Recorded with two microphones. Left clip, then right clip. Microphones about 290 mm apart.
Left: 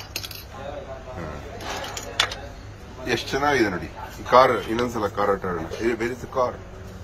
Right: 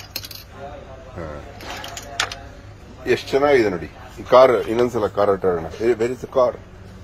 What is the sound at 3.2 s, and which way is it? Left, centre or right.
Speech, centre.